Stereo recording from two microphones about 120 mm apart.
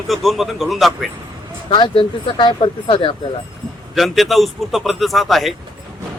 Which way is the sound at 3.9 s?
Centre (ahead or behind).